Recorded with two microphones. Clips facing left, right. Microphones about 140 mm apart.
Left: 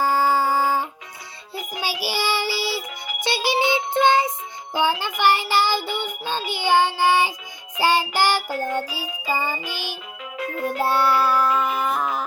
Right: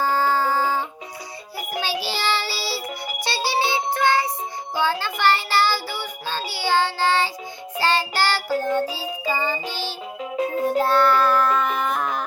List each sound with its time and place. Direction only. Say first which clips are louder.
0.0 s a sound: left 1 dB; 10° left (ahead or behind)
1.8 s child singing: even; 10° left (ahead or behind)
3.2 s music: left 2 dB; 15° left (ahead or behind)
4.7 s child singing: left 2 dB; 15° left (ahead or behind)
7.8 s music: left 2 dB; 15° left (ahead or behind)